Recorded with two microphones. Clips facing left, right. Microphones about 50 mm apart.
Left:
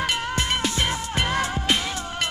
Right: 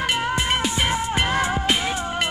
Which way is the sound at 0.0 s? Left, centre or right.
Centre.